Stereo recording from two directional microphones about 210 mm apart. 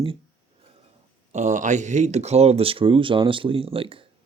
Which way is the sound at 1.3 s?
35° right (ahead or behind).